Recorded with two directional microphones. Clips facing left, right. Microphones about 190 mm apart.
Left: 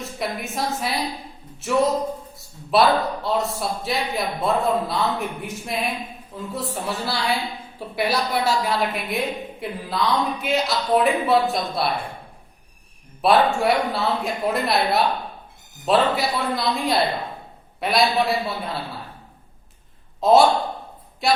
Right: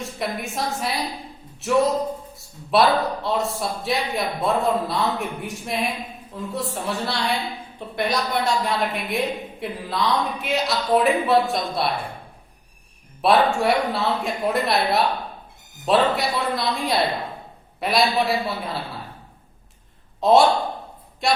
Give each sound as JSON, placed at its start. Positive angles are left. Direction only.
{"t": 0.0, "sound": "a woman's voice", "side_deg": 0}
{"t": 13.2, "sound": "a woman's voice", "side_deg": 0}
{"t": 20.2, "sound": "a woman's voice", "side_deg": 0}